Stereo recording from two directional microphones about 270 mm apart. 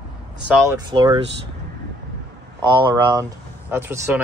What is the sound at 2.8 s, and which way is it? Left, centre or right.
Speech, centre.